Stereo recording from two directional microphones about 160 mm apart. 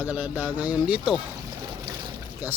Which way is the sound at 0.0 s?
10° right (ahead or behind).